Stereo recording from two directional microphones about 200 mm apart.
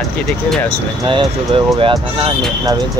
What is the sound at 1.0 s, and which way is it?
Speech, 25° right (ahead or behind).